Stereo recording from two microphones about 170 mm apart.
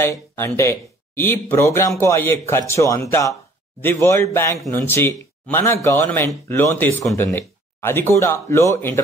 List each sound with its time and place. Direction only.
0.0 s speech: 15° left (ahead or behind)